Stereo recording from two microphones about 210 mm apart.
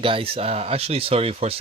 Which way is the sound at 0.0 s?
25° right (ahead or behind).